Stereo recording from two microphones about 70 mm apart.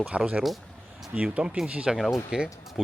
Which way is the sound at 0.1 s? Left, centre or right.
Centre.